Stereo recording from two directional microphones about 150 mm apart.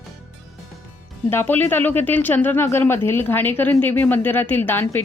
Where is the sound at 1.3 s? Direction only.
15° left (ahead or behind).